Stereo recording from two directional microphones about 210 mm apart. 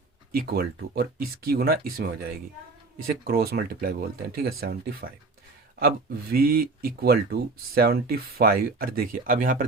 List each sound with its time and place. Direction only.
0.3 s speech: 45° right (ahead or behind)
3.2 s speech: 45° right (ahead or behind)
6.3 s speech: 45° right (ahead or behind)